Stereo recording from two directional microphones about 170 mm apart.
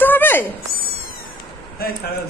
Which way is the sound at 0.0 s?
10° left (ahead or behind).